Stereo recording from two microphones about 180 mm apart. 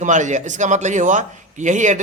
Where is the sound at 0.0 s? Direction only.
45° right (ahead or behind).